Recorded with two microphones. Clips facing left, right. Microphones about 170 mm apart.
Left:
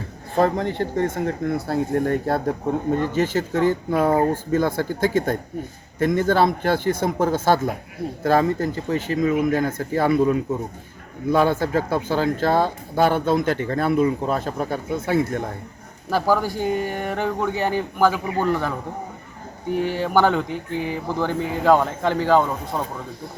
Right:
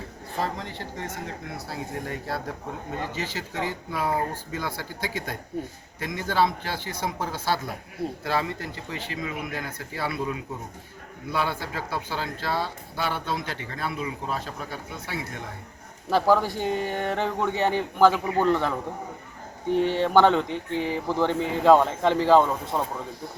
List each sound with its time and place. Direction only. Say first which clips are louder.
0.3 s speech: left 11 dB; 55° left (ahead or behind)
16.0 s speech: left 1 dB; centre (ahead or behind)
20.0 s speech: even; 5° left (ahead or behind)